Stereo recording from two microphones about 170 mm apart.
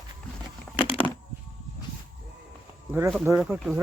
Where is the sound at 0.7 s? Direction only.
30° left (ahead or behind).